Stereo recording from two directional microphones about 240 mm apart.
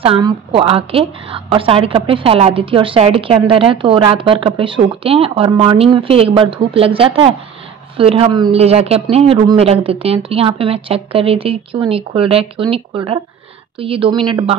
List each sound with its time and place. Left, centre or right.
0.0 s a woman's voice: right